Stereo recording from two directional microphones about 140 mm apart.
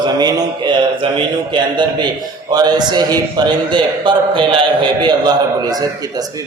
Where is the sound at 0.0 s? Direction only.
30° right (ahead or behind).